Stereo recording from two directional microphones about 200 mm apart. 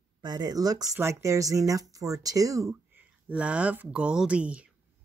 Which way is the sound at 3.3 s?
5° right (ahead or behind).